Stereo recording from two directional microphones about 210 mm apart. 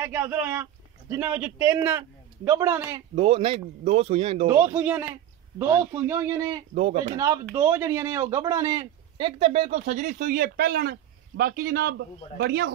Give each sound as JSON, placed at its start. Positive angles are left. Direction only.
{"t": 0.0, "sound": "a man's voice", "side_deg": -10}
{"t": 3.2, "sound": "speech", "side_deg": -25}
{"t": 4.5, "sound": "a man's voice", "side_deg": -10}
{"t": 6.7, "sound": "speech", "side_deg": -30}
{"t": 7.5, "sound": "a man's voice", "side_deg": -10}
{"t": 9.4, "sound": "speech", "side_deg": -30}